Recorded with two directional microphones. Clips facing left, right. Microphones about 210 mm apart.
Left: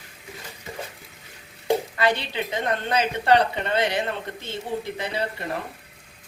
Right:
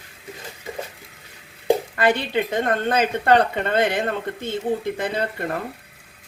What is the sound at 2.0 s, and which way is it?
A woman's voice, 50° right (ahead or behind).